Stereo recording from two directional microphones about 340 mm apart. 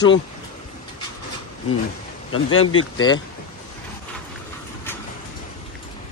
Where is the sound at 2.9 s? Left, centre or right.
Centre.